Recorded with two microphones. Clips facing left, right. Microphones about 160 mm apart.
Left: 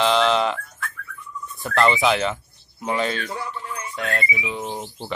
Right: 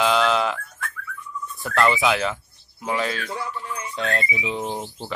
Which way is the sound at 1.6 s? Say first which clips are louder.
Left 1 dB; centre (ahead or behind).